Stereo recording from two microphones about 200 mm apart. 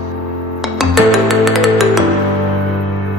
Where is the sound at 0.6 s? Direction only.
Centre (ahead or behind).